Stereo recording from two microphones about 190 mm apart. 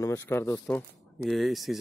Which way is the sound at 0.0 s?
10° left (ahead or behind).